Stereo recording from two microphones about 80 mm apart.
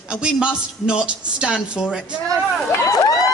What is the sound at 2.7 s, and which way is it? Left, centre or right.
Crowd, left.